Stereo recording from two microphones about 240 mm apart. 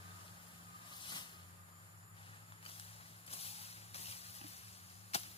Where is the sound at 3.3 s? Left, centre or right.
Left.